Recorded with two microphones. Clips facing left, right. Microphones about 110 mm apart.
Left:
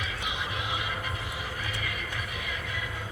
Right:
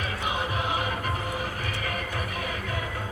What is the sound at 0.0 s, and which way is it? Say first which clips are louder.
Music: right 5 dB; 45° right (ahead or behind).